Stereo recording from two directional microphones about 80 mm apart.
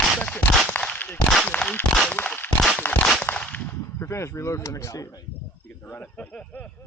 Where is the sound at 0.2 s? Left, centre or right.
Centre.